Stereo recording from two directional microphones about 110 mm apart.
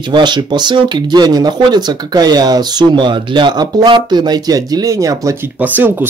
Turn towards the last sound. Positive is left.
turn(degrees=-15)  # may be behind; listen again after turning